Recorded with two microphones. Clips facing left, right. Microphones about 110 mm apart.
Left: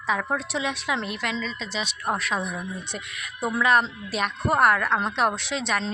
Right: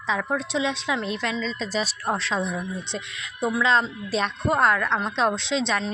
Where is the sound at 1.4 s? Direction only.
40° right (ahead or behind).